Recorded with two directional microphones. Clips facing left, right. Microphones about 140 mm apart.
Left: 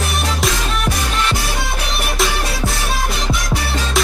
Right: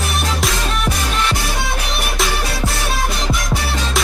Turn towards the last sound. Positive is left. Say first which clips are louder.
# left 1 dB
turn(degrees=0)  # may be behind; listen again after turning